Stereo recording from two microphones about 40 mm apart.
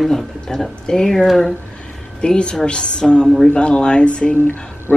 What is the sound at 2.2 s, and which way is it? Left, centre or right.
Speech, left.